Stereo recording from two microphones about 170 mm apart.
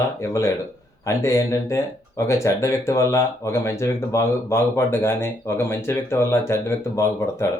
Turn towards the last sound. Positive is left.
turn(degrees=15)  # may be behind; listen again after turning